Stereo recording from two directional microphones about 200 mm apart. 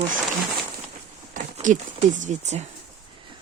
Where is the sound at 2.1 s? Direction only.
35° right (ahead or behind).